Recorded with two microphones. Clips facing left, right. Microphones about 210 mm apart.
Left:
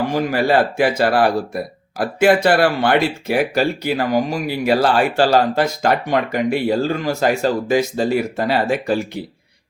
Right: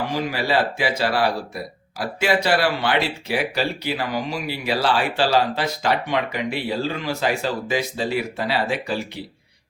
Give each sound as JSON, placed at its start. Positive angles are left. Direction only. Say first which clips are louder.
{"t": 0.1, "sound": "speech", "louder": "left 6 dB", "side_deg": 50}